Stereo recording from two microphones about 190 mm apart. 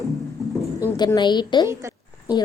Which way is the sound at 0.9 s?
20° left (ahead or behind).